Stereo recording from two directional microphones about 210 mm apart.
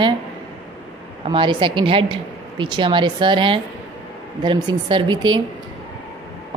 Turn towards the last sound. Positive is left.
turn(degrees=-20)  # may be behind; listen again after turning